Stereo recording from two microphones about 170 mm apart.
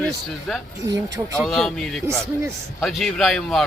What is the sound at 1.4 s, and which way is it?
A man's voice, centre (ahead or behind).